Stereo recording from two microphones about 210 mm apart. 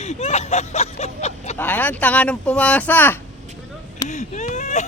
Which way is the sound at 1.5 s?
10° left (ahead or behind).